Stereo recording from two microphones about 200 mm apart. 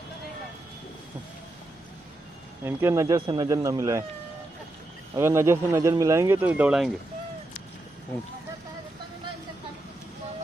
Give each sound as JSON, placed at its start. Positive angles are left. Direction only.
{"t": 2.6, "sound": "speech", "side_deg": -15}
{"t": 5.1, "sound": "speech", "side_deg": -15}